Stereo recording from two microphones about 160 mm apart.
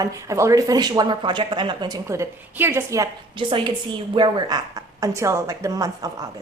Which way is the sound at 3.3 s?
30° right (ahead or behind).